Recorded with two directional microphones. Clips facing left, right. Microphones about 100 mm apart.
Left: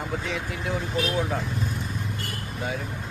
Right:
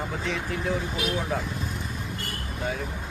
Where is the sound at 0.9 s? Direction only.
Centre (ahead or behind).